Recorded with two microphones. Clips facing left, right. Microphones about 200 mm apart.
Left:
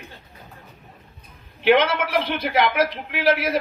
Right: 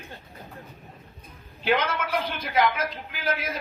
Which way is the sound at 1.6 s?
70° left (ahead or behind).